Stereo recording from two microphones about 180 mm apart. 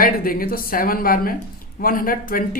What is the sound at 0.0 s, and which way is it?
Speech, 50° left (ahead or behind).